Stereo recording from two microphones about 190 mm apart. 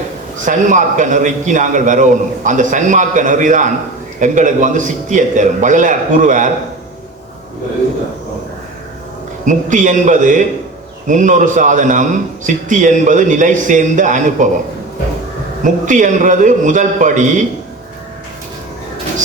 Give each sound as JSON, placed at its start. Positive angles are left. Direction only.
{"t": 0.3, "sound": "a man's voice", "side_deg": -40}
{"t": 9.5, "sound": "a man's voice", "side_deg": -40}
{"t": 15.6, "sound": "a man's voice", "side_deg": -40}